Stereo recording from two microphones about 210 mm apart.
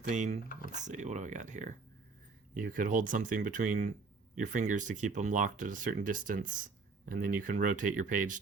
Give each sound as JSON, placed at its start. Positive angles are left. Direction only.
{"t": 0.1, "sound": "speech", "side_deg": -35}
{"t": 0.4, "sound": "speech", "side_deg": 40}
{"t": 0.7, "sound": "speech", "side_deg": -35}